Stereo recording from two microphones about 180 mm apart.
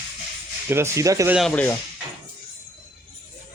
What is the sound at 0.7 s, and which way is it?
Speech, 15° right (ahead or behind).